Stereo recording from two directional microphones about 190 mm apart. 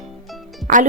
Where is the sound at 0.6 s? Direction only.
40° right (ahead or behind).